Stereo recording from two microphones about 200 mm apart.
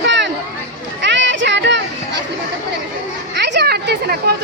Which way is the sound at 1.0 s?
65° right (ahead or behind).